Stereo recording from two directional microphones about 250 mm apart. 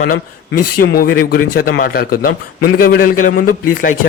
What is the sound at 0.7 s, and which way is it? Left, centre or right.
A man's voice, left.